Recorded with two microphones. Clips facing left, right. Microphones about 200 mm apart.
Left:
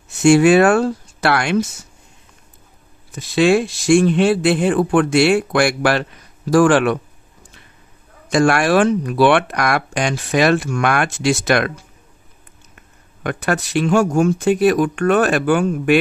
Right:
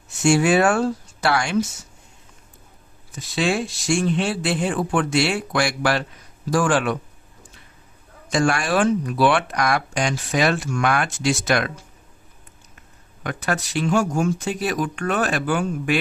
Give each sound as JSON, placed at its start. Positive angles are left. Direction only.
{"t": 0.2, "sound": "speech", "side_deg": 60}
{"t": 3.2, "sound": "speech", "side_deg": 65}
{"t": 8.3, "sound": "speech", "side_deg": 65}
{"t": 13.2, "sound": "speech", "side_deg": 60}